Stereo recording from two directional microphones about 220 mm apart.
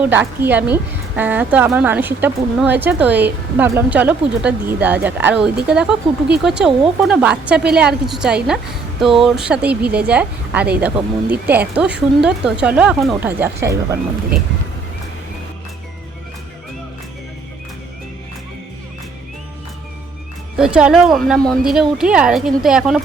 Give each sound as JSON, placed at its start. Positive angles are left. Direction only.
{"t": 0.0, "sound": "speech", "side_deg": -10}
{"t": 20.6, "sound": "speech", "side_deg": -5}